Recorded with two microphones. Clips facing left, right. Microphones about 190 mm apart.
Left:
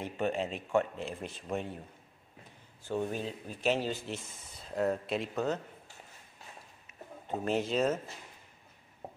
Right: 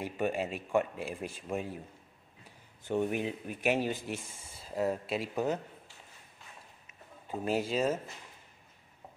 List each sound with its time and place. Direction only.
0.0 s speech: 10° right (ahead or behind)
2.8 s speech: 20° right (ahead or behind)
7.4 s speech: 5° right (ahead or behind)
9.0 s a sound: 40° left (ahead or behind)